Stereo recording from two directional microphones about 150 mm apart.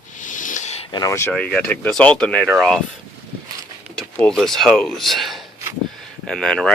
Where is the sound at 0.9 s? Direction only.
25° left (ahead or behind).